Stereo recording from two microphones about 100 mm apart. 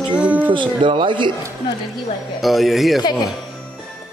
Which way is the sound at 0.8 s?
55° right (ahead or behind).